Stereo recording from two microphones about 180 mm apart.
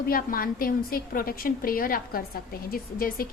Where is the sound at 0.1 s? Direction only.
55° left (ahead or behind).